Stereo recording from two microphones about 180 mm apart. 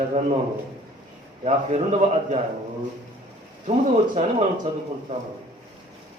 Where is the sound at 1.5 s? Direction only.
35° right (ahead or behind).